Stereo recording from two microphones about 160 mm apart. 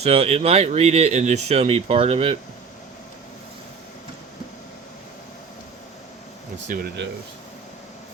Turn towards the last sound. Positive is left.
turn(degrees=-90)